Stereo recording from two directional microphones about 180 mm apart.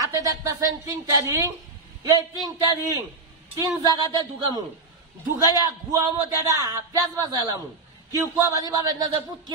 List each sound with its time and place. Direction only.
0.0 s a man's voice: 20° right (ahead or behind)